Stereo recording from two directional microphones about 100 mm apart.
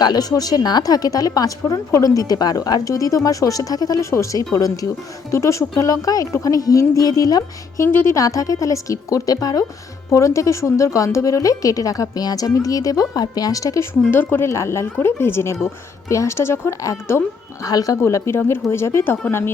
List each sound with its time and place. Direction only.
0.0 s speech: 40° left (ahead or behind)
7.9 s speech: 20° left (ahead or behind)
8.1 s speech: 35° left (ahead or behind)
14.1 s speech: 20° left (ahead or behind)